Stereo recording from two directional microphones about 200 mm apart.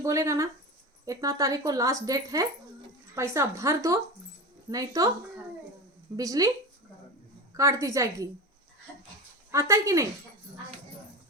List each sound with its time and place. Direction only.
0.0 s speech: 15° right (ahead or behind)
6.1 s speech: 15° right (ahead or behind)
7.5 s speech: 15° right (ahead or behind)
9.5 s speech: 15° right (ahead or behind)